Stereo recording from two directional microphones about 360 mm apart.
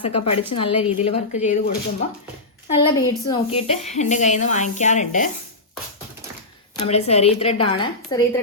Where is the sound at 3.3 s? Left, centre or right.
Centre.